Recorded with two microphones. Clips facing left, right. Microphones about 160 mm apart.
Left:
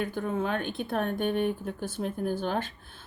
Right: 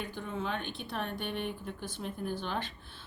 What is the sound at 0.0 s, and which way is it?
Speech, 50° left (ahead or behind).